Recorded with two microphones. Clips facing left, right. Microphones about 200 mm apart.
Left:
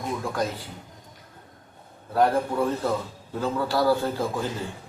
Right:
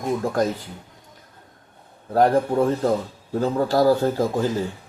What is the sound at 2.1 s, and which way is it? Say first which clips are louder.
Speech: right 4 dB; 40° right (ahead or behind).